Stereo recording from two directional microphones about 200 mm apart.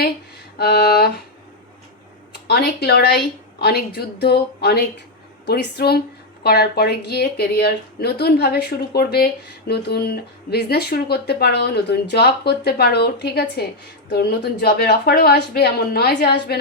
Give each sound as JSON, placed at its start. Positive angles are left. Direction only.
{"t": 0.6, "sound": "speech", "side_deg": 50}
{"t": 2.3, "sound": "speech", "side_deg": 50}